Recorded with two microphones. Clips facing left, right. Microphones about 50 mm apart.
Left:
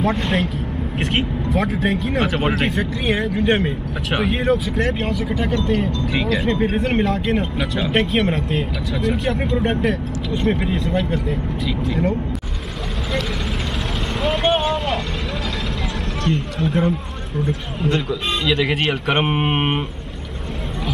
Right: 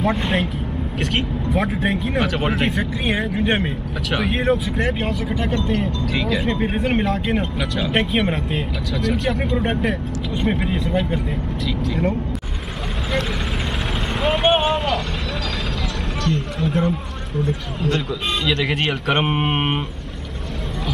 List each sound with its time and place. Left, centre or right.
0.0 s speech: centre
0.9 s speech: centre
1.5 s speech: centre
4.6 s speech: centre
4.9 s speech: centre
14.2 s vehicle: centre
14.5 s vehicle: centre
16.5 s a man's voice: centre
18.4 s speech: centre